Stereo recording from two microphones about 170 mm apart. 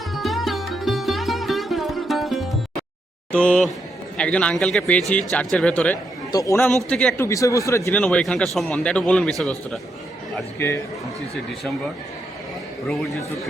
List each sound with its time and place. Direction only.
0.1 s music: centre (ahead or behind)
3.3 s speech: 5° left (ahead or behind)
6.3 s speech: 20° left (ahead or behind)
7.3 s speech: 20° left (ahead or behind)
8.0 s speech: 5° left (ahead or behind)
12.9 s speech: centre (ahead or behind)